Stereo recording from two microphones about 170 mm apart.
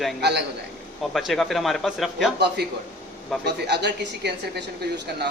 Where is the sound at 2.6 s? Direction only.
70° right (ahead or behind).